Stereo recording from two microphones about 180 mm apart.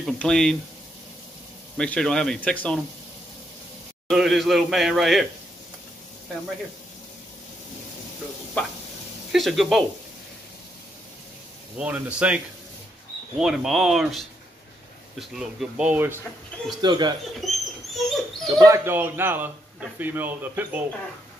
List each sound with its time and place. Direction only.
0.0 s a man's voice: 5° left (ahead or behind)
1.8 s a man's voice: 5° left (ahead or behind)
4.1 s a man's voice: centre (ahead or behind)
9.3 s a man's voice: centre (ahead or behind)
11.8 s speech: 5° right (ahead or behind)
13.4 s a man's voice: 5° right (ahead or behind)
16.8 s speech: 25° right (ahead or behind)
17.4 s a sound: centre (ahead or behind)
17.9 s dog: centre (ahead or behind)
18.6 s speech: 15° right (ahead or behind)